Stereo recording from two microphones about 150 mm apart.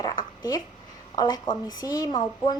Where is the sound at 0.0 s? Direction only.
25° left (ahead or behind).